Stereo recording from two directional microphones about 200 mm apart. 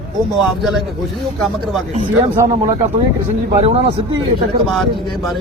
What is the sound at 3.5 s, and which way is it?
Speech, 30° right (ahead or behind).